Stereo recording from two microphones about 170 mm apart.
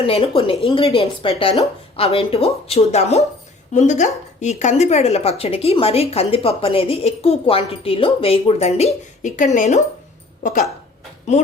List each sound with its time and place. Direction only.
0.0 s a woman's voice: 35° left (ahead or behind); by 10.7 s 50° left (ahead or behind)